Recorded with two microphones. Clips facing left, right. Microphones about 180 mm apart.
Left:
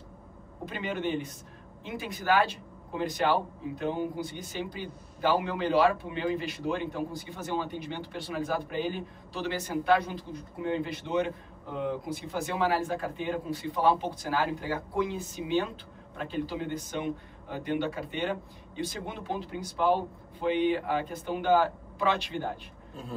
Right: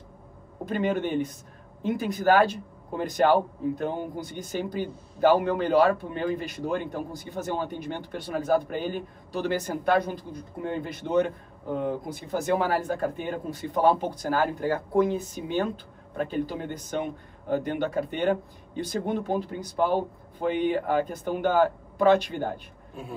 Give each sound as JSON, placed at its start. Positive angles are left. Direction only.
{"t": 0.7, "sound": "speech", "side_deg": -45}